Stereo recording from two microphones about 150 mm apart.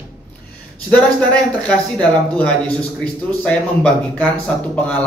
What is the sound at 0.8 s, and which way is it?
Speech, 10° left (ahead or behind).